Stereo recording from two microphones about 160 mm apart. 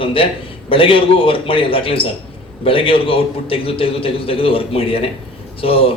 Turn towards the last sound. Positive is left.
turn(degrees=35)  # may be behind; listen again after turning